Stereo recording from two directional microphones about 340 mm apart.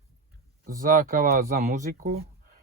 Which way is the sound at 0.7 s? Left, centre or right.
Right.